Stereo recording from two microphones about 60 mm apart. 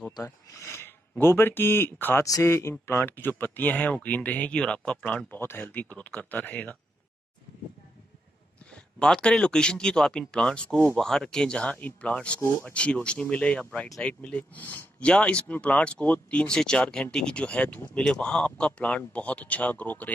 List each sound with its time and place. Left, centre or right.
0.2 s speech: left
2.4 s speech: left
2.9 s speech: left
9.0 s speech: centre
12.4 s speech: left
12.6 s speech: centre